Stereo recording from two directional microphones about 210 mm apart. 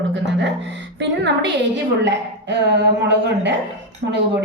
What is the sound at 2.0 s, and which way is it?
A woman's voice, 55° right (ahead or behind).